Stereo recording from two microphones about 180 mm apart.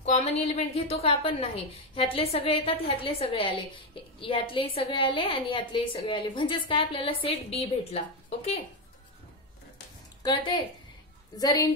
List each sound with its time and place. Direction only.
0.0 s a woman's voice: 35° left (ahead or behind)
10.2 s a woman's voice: 25° left (ahead or behind)